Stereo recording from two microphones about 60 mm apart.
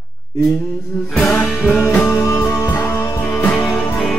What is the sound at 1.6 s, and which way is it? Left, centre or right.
Music, left.